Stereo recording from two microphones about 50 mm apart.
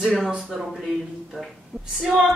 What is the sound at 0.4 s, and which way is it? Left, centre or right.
Speech, centre.